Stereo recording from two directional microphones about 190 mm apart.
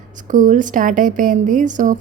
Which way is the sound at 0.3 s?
45° right (ahead or behind).